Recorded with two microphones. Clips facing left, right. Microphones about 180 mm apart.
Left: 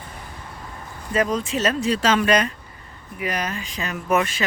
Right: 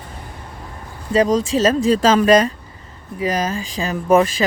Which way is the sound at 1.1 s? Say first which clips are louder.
Right 6 dB; 40° right (ahead or behind).